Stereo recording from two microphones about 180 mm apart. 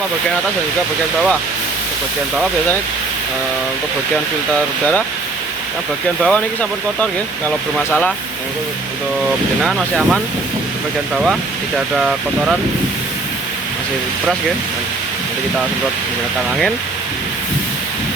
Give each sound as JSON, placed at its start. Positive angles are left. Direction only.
{"t": 6.2, "sound": "speech", "side_deg": 5}
{"t": 9.6, "sound": "speech", "side_deg": 0}